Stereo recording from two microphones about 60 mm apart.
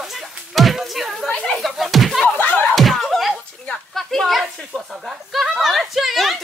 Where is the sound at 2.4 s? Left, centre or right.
Left.